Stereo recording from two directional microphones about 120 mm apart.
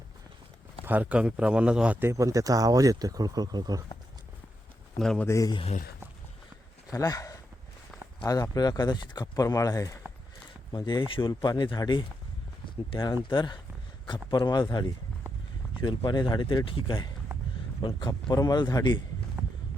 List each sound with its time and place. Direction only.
0.9 s a man's voice: 15° right (ahead or behind)
2.0 s speech: 25° right (ahead or behind)
4.9 s speech: 5° left (ahead or behind)
5.2 s speech: 25° left (ahead or behind)
6.9 s speech: 30° left (ahead or behind)
10.8 s speech: 40° left (ahead or behind)
13.3 s speech: 40° left (ahead or behind)